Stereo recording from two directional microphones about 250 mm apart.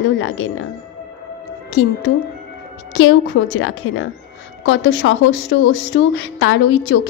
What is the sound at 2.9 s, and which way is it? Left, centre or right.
A woman's voice, left.